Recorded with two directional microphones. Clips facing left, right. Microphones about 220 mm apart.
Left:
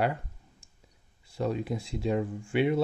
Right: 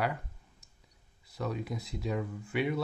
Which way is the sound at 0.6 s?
30° left (ahead or behind).